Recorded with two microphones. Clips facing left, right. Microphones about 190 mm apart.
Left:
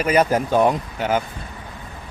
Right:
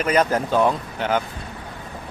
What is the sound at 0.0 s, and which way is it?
Speech, 10° left (ahead or behind).